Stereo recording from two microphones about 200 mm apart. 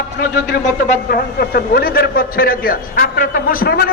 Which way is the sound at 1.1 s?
50° left (ahead or behind).